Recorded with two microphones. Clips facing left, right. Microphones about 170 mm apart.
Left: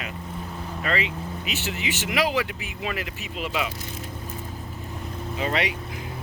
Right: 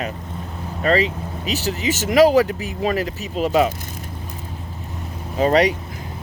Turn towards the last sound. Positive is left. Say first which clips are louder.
# right 10 dB
turn(degrees=-40)  # may be behind; listen again after turning